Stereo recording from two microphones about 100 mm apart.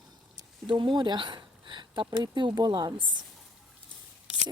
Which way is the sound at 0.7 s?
55° right (ahead or behind).